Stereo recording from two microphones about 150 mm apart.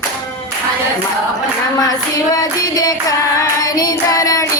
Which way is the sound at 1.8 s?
25° left (ahead or behind).